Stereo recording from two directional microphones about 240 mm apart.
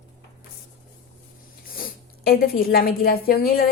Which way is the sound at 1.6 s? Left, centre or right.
Left.